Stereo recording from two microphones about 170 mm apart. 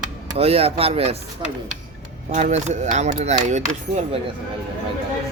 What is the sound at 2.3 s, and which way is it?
Speech, 45° right (ahead or behind).